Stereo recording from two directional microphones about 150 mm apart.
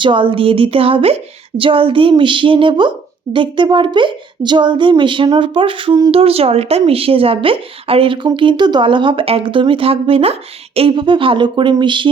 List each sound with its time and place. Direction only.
0.0 s speech: 35° right (ahead or behind)